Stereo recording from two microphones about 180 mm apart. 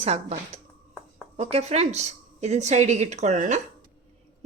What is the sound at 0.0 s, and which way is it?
Speech, 35° right (ahead or behind).